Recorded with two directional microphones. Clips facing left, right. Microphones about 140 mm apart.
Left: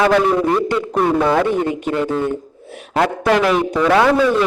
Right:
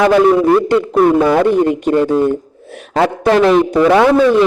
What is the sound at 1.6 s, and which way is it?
Speech, 35° right (ahead or behind).